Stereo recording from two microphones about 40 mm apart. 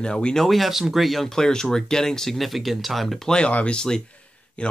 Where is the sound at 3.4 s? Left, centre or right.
Left.